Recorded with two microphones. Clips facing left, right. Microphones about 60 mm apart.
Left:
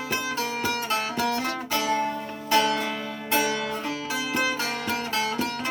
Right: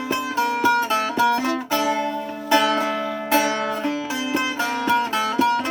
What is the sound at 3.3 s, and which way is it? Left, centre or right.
Music, right.